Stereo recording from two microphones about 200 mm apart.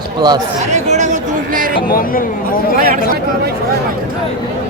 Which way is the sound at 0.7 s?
35° right (ahead or behind).